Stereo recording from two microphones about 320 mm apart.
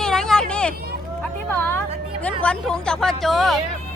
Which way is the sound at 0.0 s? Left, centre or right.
Centre.